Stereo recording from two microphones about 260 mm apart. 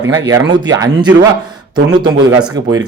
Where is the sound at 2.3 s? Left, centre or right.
Centre.